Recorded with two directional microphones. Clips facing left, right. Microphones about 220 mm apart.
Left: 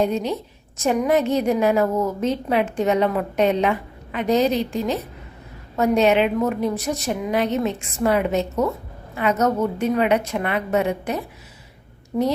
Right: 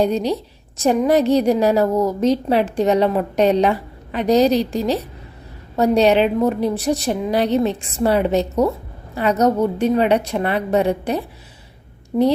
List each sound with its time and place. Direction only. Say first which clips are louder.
0.0 s a woman's voice: right 3 dB; 35° right (ahead or behind)